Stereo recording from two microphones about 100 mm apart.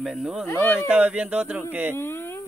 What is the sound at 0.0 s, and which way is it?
Speech, 5° right (ahead or behind).